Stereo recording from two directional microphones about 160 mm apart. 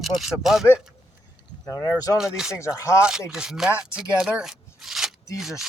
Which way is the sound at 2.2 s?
5° right (ahead or behind).